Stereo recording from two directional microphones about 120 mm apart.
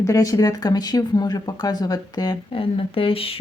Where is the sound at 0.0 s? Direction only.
30° left (ahead or behind).